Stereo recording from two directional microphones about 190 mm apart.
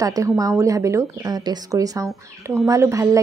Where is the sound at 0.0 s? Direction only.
20° right (ahead or behind).